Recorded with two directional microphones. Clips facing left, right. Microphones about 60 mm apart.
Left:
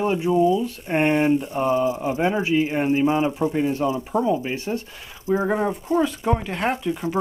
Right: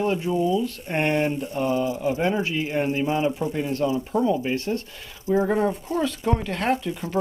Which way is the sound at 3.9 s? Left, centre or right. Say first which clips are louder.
Left 1 dB; left.